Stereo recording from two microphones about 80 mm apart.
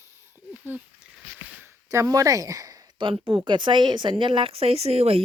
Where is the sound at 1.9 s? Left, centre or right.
Right.